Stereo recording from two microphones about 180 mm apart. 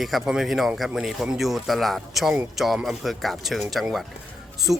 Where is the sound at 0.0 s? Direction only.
Centre (ahead or behind).